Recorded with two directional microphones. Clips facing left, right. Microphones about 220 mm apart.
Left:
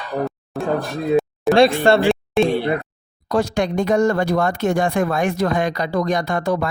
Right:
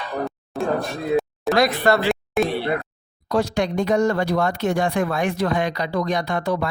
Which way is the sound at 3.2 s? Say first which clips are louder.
Left 2 dB; 50° left (ahead or behind).